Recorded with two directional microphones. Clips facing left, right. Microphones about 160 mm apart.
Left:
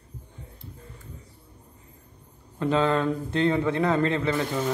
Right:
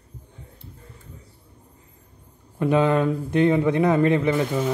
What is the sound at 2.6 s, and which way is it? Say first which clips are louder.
A man's voice: right 4 dB; 15° right (ahead or behind).